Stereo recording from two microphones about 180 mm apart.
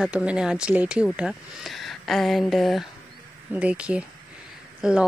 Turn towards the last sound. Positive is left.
turn(degrees=-5)  # may be behind; listen again after turning